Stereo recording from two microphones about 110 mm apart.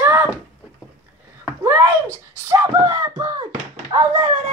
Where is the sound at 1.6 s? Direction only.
25° right (ahead or behind); by 4.1 s 40° right (ahead or behind).